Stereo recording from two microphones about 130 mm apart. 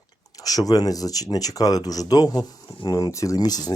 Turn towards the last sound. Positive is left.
turn(degrees=30)  # may be behind; listen again after turning